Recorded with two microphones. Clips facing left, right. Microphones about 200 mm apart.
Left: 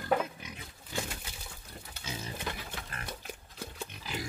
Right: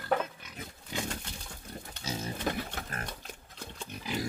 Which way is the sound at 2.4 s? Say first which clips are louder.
Right 6 dB; 45° right (ahead or behind).